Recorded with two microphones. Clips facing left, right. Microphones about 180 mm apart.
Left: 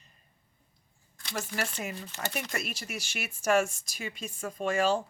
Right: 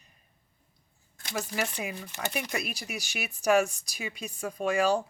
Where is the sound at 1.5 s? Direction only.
15° right (ahead or behind).